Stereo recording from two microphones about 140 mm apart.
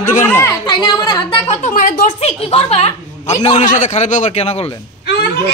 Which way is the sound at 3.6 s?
60° left (ahead or behind).